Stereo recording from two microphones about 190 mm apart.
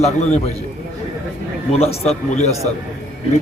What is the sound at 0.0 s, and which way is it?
Speech, 35° left (ahead or behind).